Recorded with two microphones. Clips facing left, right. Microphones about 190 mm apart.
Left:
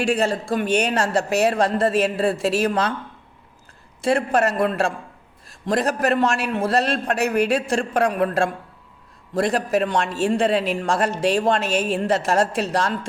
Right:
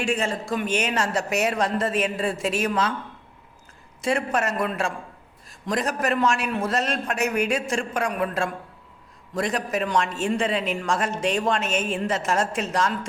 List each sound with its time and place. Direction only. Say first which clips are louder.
0.0 s a man's voice: left 5 dB; 35° left (ahead or behind)
4.0 s a man's voice: left 5 dB; 35° left (ahead or behind)
9.3 s a man's voice: left 5 dB; 35° left (ahead or behind)